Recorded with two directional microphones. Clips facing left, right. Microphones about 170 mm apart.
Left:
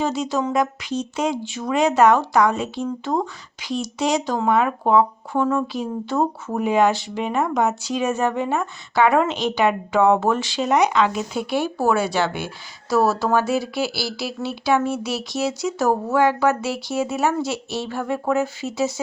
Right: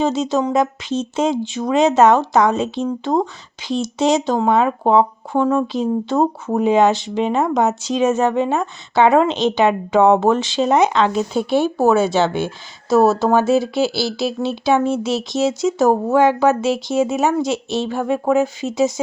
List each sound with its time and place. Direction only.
0.0 s speech: 20° right (ahead or behind)